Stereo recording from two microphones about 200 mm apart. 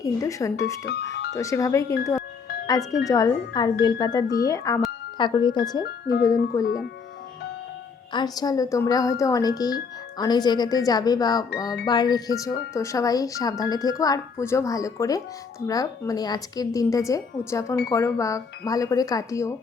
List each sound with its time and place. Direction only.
0.0 s speech: 15° left (ahead or behind)
0.9 s speech: 55° left (ahead or behind)
1.4 s speech: 15° left (ahead or behind)
5.8 s speech: 50° left (ahead or behind)
6.5 s speech: 15° left (ahead or behind)
8.1 s speech: 20° left (ahead or behind)